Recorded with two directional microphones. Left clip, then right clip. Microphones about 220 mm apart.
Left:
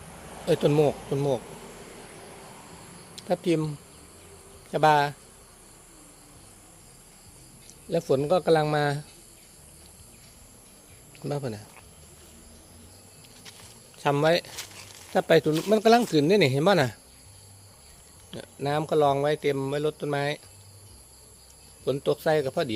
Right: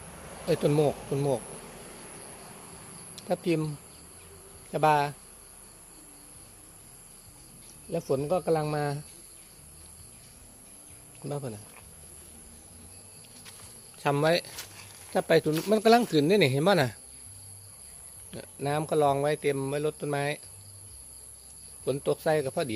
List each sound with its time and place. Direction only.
0.4 s speech: 10° left (ahead or behind)
3.2 s speech: 5° left (ahead or behind)
4.7 s speech: 10° left (ahead or behind)
7.9 s speech: 20° left (ahead or behind)
11.3 s speech: 20° left (ahead or behind)
14.0 s speech: 5° left (ahead or behind)
15.1 s speech: 10° left (ahead or behind)
18.3 s speech: centre (ahead or behind)
21.8 s speech: 5° left (ahead or behind)